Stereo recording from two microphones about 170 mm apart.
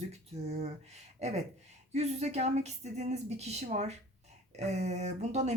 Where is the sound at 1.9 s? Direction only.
40° right (ahead or behind).